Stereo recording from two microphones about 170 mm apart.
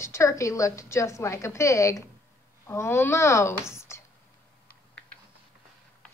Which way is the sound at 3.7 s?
15° left (ahead or behind).